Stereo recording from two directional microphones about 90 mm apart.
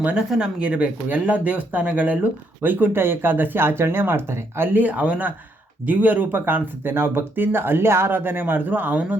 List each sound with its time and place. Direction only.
0.0 s speech: 15° right (ahead or behind)